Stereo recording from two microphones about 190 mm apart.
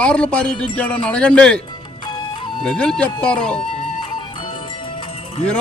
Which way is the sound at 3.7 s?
25° left (ahead or behind).